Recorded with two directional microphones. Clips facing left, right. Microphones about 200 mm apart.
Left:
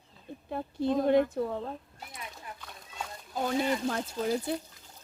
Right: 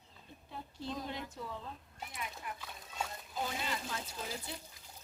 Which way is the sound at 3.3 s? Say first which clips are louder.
Left 11 dB; 50° left (ahead or behind).